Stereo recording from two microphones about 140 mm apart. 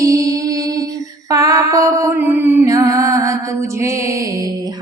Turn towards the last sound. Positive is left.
turn(degrees=-25)  # may be behind; listen again after turning